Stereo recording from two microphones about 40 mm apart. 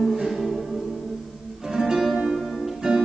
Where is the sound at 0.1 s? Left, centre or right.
Centre.